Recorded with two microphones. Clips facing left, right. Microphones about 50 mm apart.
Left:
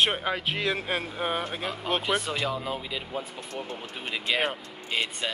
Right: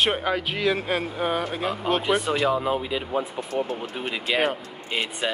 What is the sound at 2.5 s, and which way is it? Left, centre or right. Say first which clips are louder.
Speech: right 7 dB; right.